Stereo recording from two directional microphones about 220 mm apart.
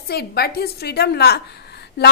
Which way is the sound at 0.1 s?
45° left (ahead or behind).